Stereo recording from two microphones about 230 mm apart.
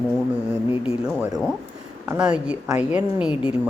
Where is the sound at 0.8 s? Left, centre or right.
Centre.